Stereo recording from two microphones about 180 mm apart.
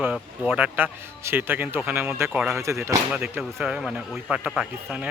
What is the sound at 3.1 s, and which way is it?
A man's voice, 5° right (ahead or behind).